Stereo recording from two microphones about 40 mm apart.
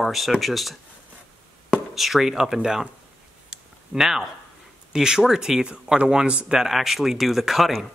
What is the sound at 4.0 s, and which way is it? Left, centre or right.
Speech, centre.